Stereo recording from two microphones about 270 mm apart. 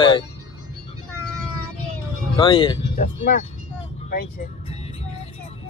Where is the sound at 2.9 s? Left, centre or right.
Left.